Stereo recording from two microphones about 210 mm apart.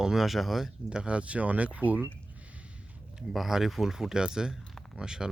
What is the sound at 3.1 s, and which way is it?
Speech, centre (ahead or behind).